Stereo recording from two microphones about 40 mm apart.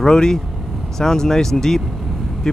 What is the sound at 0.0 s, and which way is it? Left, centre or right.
Speech, centre.